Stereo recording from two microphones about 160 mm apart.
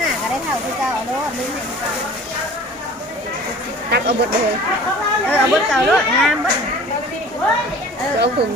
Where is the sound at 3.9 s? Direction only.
80° right.